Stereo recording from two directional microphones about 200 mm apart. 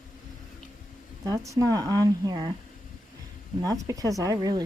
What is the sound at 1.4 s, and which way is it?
Speech, 15° right (ahead or behind).